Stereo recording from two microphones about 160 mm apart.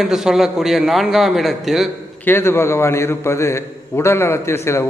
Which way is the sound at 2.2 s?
15° left (ahead or behind).